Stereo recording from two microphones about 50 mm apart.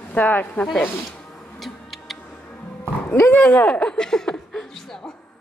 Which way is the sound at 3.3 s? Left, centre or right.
Left.